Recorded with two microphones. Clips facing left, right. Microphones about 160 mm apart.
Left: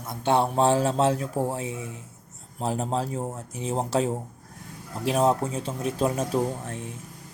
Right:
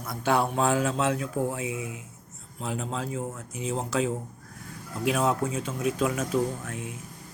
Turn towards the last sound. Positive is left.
turn(degrees=35)  # may be behind; listen again after turning